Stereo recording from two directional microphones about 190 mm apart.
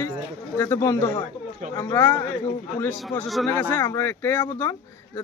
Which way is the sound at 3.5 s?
10° left (ahead or behind).